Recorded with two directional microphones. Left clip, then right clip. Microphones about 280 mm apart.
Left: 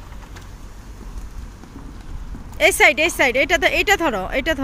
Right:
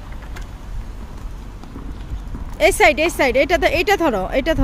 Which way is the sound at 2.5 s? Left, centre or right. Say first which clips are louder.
Even; centre.